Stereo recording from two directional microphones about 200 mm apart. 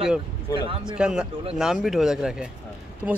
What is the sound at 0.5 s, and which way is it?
Speech, 20° left (ahead or behind).